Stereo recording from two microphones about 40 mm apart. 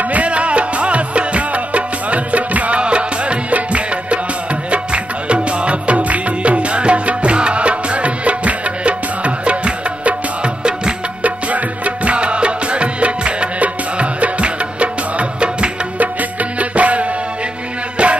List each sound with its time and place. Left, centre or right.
0.0 s music: right
2.8 s music: right
11.2 s music: right
16.0 s music: right